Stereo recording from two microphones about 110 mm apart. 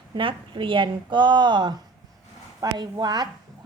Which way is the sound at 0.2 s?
50° right (ahead or behind).